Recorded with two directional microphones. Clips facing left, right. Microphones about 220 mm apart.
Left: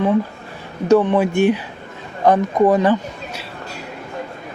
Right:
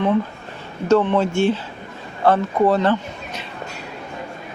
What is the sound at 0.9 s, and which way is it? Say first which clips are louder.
Speech: left 2 dB; 15° left (ahead or behind).